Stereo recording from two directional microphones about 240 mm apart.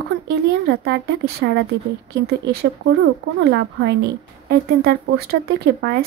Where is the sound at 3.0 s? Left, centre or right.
Right.